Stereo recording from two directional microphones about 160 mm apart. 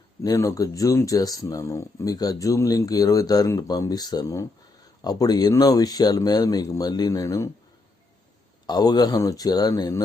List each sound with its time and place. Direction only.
0.2 s speech: 20° left (ahead or behind)
8.6 s speech: 25° left (ahead or behind)